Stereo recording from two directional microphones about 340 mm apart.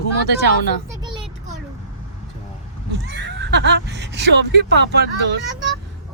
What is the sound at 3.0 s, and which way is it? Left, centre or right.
Speech, right.